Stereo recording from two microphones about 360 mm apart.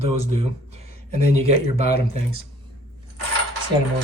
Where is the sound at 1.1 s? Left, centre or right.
Centre.